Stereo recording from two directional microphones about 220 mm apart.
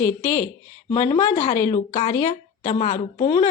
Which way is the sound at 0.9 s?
20° left (ahead or behind).